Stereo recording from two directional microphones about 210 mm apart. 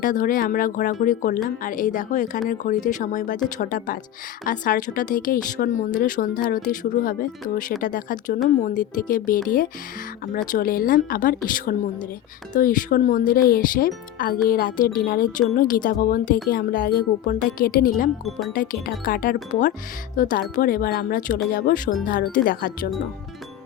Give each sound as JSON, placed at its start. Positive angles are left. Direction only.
{"t": 0.0, "sound": "a woman's voice", "side_deg": 40}
{"t": 18.3, "sound": "speech", "side_deg": 0}
{"t": 18.5, "sound": "a woman's voice", "side_deg": 40}